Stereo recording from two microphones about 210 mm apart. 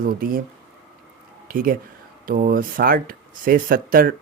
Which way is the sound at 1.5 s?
40° right (ahead or behind).